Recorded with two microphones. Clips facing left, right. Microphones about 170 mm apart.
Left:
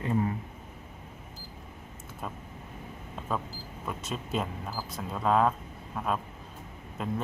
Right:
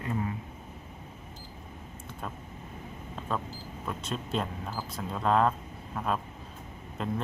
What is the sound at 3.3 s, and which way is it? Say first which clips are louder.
Speech: even; 5° left (ahead or behind).